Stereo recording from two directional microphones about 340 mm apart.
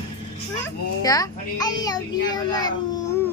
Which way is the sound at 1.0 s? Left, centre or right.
Centre.